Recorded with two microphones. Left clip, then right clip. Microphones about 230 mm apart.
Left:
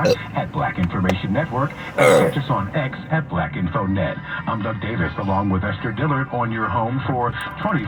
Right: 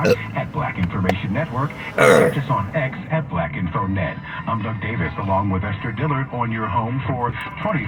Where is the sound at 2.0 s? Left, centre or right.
Centre.